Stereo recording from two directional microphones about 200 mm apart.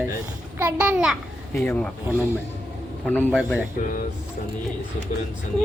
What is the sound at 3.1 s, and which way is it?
Speech, 5° left (ahead or behind).